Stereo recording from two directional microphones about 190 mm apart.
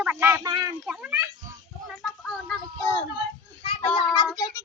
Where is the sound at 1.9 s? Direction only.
5° left (ahead or behind).